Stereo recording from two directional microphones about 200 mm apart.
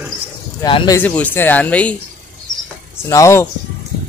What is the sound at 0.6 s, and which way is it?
Speech, 20° left (ahead or behind).